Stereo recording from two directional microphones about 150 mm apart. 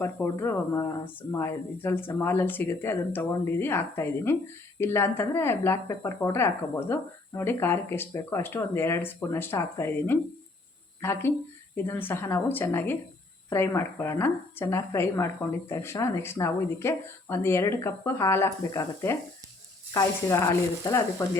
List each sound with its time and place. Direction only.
0.0 s speech: 15° left (ahead or behind)